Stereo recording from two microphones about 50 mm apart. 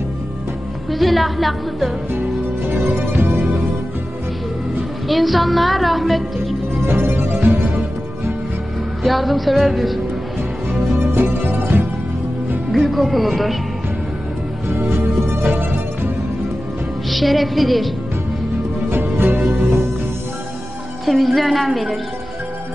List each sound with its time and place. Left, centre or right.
0.9 s a woman's voice: centre
5.0 s music: centre
6.9 s music: right
9.0 s a woman's voice: centre
11.0 s music: right
12.7 s a woman's voice: centre
15.2 s music: right
17.1 s a woman's voice: centre
18.9 s music: right
21.0 s a woman's voice: centre